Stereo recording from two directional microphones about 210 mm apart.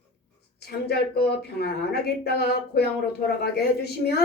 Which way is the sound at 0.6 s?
50° left (ahead or behind).